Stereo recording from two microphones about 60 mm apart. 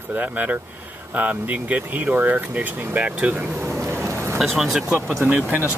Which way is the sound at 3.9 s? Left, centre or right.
Right.